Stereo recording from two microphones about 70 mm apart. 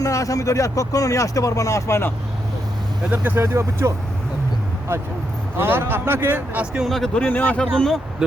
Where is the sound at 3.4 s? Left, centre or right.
Right.